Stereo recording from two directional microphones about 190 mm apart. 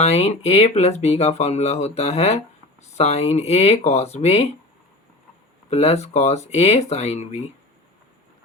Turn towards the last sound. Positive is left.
turn(degrees=35)  # may be behind; listen again after turning